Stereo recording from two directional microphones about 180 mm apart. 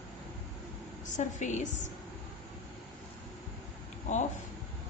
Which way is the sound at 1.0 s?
45° left (ahead or behind).